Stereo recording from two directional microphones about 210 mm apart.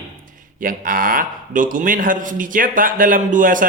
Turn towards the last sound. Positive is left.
turn(degrees=-40)  # may be behind; listen again after turning